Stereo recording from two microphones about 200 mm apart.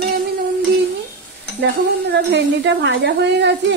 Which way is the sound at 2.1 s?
60° right (ahead or behind).